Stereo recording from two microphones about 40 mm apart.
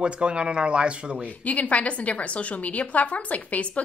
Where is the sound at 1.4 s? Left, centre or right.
Left.